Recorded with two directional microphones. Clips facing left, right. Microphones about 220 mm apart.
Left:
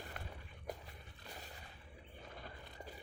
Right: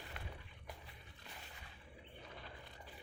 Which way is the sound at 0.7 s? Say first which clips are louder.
Left 8 dB; 45° left (ahead or behind).